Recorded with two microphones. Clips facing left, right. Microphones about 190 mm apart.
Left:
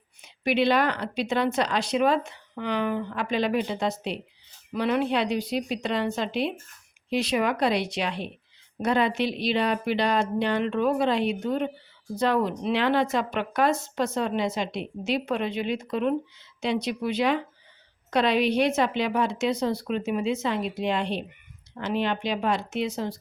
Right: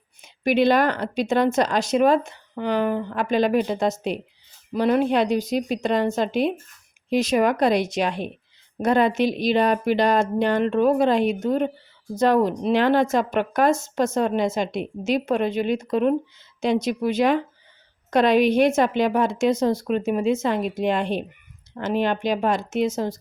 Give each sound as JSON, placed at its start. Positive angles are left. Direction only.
{"t": 0.2, "sound": "speech", "side_deg": -45}